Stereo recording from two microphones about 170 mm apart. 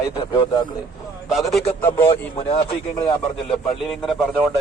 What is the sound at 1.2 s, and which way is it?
Speech, centre (ahead or behind).